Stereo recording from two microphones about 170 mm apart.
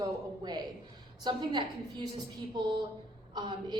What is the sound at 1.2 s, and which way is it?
Speech, 25° right (ahead or behind).